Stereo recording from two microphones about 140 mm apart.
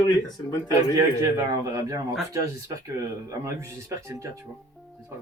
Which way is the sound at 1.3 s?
25° right (ahead or behind).